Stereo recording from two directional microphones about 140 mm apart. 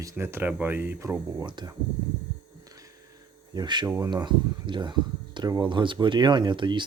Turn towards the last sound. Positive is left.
turn(degrees=-35)  # may be behind; listen again after turning